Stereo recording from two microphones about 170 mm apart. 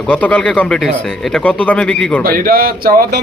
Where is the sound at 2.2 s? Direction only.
60° right (ahead or behind).